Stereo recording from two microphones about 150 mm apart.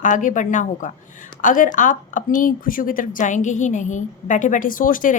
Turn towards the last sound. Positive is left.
turn(degrees=65)  # may be behind; listen again after turning